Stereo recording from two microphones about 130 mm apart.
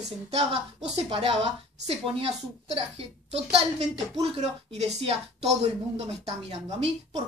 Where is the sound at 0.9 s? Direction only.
45° right (ahead or behind).